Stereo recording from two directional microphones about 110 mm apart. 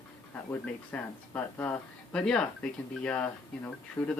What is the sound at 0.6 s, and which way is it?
Speech, 15° left (ahead or behind).